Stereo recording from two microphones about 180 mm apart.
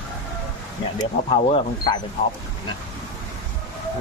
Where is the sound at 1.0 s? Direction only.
35° left (ahead or behind).